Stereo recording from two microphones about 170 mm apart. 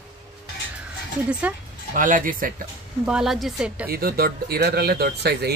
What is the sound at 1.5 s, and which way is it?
Speech, 10° right (ahead or behind).